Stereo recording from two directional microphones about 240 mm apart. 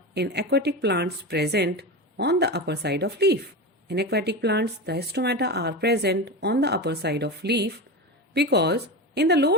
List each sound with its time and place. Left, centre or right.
0.1 s a woman's voice: right